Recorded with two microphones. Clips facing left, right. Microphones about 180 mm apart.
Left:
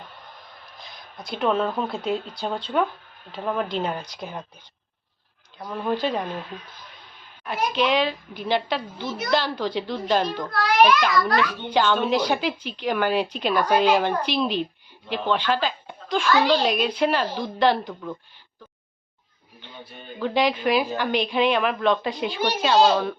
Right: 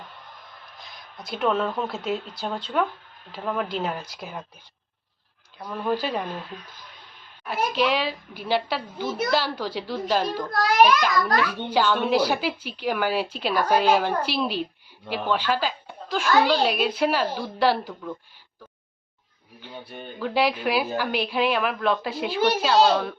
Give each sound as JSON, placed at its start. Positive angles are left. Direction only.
{"t": 0.8, "sound": "a woman's voice", "side_deg": 0}
{"t": 5.5, "sound": "a woman's voice", "side_deg": 5}
{"t": 5.9, "sound": "a woman's voice", "side_deg": -5}
{"t": 7.4, "sound": "a woman's voice", "side_deg": -5}
{"t": 10.5, "sound": "a child's voice", "side_deg": -45}
{"t": 11.7, "sound": "a woman's voice", "side_deg": -5}
{"t": 19.6, "sound": "a woman's voice", "side_deg": -5}